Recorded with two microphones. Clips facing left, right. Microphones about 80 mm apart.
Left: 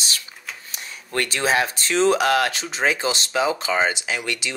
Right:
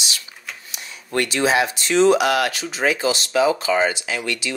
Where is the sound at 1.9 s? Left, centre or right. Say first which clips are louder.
Right 4 dB; right.